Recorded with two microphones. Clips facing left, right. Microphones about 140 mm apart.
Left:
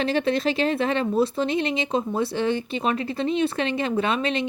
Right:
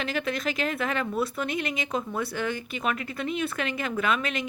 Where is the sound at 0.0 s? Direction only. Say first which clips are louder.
Left 7 dB; 30° left (ahead or behind).